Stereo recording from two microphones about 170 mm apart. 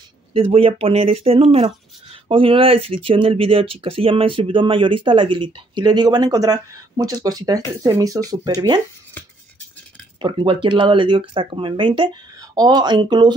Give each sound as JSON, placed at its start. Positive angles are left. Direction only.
{"t": 0.3, "sound": "speech", "side_deg": -35}
{"t": 10.2, "sound": "speech", "side_deg": -30}